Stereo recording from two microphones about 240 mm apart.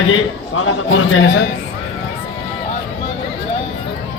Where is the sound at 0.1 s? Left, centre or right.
Left.